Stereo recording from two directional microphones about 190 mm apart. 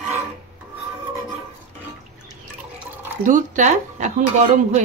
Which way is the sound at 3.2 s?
40° right (ahead or behind).